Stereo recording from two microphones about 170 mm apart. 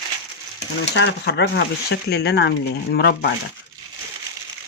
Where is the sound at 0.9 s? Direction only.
85° left.